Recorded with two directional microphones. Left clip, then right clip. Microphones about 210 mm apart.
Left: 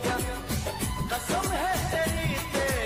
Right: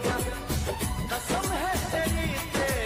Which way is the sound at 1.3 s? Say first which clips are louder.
Left 1 dB; centre (ahead or behind).